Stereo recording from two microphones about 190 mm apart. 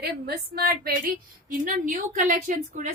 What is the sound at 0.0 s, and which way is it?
A woman's voice, 55° right (ahead or behind).